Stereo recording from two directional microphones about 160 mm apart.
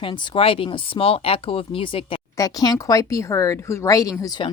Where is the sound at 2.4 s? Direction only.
25° left (ahead or behind).